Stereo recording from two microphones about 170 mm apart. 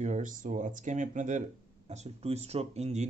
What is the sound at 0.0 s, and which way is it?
Speech, 45° right (ahead or behind).